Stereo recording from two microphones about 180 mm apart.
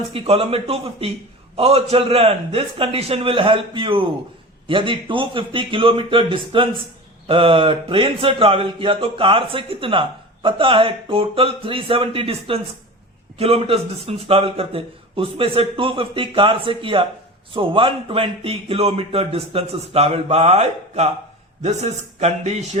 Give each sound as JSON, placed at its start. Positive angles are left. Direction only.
{"t": 0.1, "sound": "a man's voice", "side_deg": -30}